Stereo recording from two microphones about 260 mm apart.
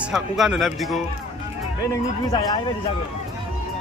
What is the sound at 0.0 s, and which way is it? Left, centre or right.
Speech, centre.